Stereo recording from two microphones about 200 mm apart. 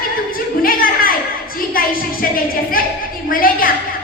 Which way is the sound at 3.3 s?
45° left (ahead or behind).